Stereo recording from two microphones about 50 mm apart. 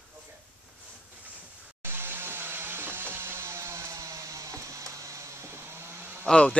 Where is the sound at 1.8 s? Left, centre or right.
Right.